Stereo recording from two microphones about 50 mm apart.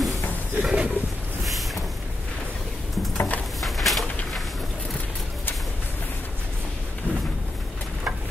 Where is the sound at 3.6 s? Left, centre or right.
Centre.